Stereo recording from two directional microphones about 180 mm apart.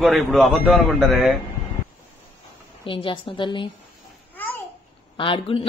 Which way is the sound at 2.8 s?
30° left (ahead or behind).